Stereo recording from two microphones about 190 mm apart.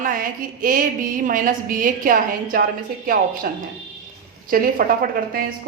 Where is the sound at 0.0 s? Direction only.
45° right (ahead or behind).